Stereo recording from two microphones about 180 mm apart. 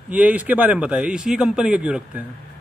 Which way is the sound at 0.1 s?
5° right (ahead or behind).